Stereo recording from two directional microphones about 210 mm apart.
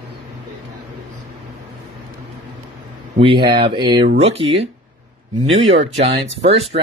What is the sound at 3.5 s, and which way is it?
Speech, 20° right (ahead or behind).